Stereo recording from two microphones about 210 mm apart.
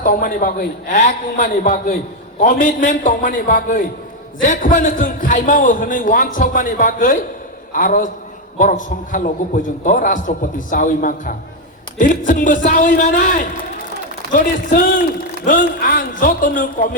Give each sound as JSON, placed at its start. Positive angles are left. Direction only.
{"t": 0.0, "sound": "a man's voice", "side_deg": 40}